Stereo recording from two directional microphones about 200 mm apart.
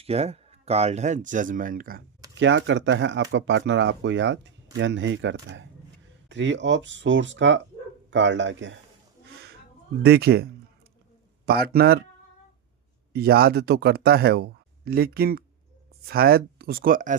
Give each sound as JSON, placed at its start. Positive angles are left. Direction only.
{"t": 0.0, "sound": "speech", "side_deg": -30}
{"t": 2.4, "sound": "speech", "side_deg": -65}
{"t": 10.0, "sound": "speech", "side_deg": -55}
{"t": 11.4, "sound": "speech", "side_deg": -50}
{"t": 13.1, "sound": "speech", "side_deg": -50}